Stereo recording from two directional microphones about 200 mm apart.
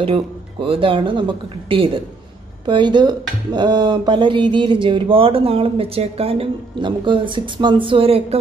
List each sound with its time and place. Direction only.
0.0 s speech: 25° right (ahead or behind)